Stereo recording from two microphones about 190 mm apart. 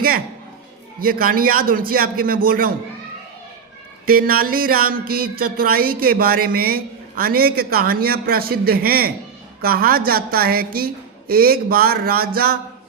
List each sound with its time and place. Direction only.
0.9 s a woman's voice: 50° right (ahead or behind)
4.0 s a woman's voice: 50° right (ahead or behind)